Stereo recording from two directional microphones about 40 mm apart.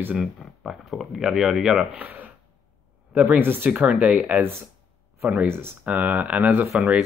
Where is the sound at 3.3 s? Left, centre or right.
Right.